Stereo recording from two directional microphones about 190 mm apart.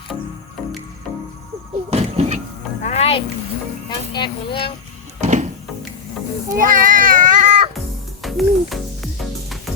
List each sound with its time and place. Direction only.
1.9 s a sound: 35° right (ahead or behind)
2.8 s music: 35° left (ahead or behind)
3.8 s speech: 25° left (ahead or behind)
5.2 s a sound: 40° right (ahead or behind)
6.6 s children playing: 45° right (ahead or behind)
8.2 s music: centre (ahead or behind)